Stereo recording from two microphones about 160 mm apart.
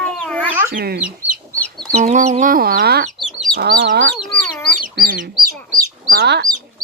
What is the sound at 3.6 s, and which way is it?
Speech, 85° right.